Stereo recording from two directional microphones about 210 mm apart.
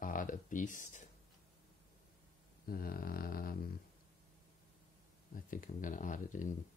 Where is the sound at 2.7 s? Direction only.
45° left (ahead or behind).